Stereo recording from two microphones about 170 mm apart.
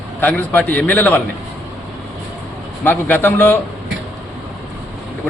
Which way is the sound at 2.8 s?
10° left (ahead or behind).